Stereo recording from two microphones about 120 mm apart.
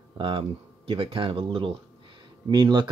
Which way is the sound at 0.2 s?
45° right (ahead or behind).